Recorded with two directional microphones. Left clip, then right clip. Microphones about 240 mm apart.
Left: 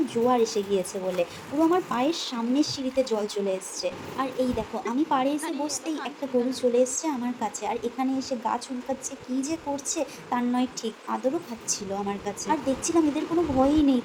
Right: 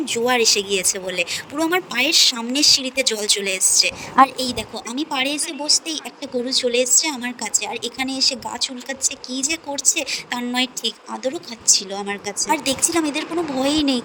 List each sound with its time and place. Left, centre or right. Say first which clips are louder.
0.0 s a woman's voice: right 5 dB; right
7.4 s a woman's voice: right 4 dB; centre
7.9 s a woman's voice: right 8 dB; right